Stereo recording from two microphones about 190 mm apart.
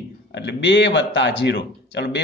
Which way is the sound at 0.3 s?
65° left (ahead or behind).